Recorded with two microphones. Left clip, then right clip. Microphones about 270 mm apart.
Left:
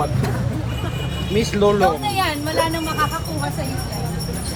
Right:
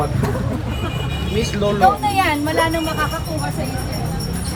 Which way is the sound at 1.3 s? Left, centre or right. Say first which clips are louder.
Left 3 dB; left.